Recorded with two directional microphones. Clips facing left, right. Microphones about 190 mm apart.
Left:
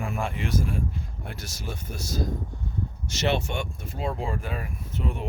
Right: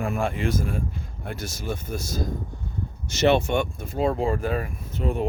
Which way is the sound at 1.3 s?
50° right (ahead or behind).